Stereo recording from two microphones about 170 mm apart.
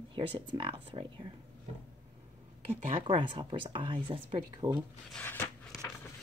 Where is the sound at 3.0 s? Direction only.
30° right (ahead or behind).